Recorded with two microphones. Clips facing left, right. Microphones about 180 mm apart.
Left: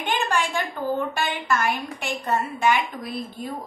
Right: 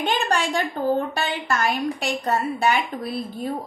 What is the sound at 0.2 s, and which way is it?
A woman's voice, 40° right (ahead or behind).